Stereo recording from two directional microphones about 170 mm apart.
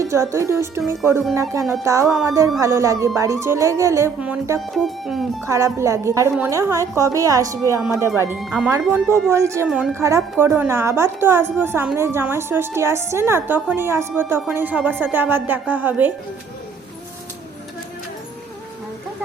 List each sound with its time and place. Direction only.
0.0 s a woman's voice: 15° right (ahead or behind)
4.7 s speech: centre (ahead or behind)
5.5 s a woman's voice: 15° right (ahead or behind)
8.4 s speech: 5° right (ahead or behind)
9.3 s a woman's voice: 15° right (ahead or behind)
9.6 s speech: centre (ahead or behind)
10.0 s a woman's voice: 15° right (ahead or behind)